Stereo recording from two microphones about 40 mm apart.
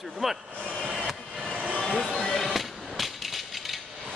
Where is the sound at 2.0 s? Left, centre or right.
Centre.